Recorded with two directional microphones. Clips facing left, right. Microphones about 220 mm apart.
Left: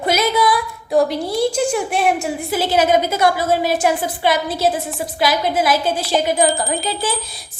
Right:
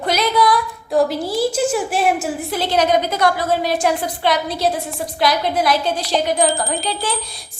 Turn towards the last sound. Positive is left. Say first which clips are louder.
# left 1 dB
turn(degrees=0)  # may be behind; listen again after turning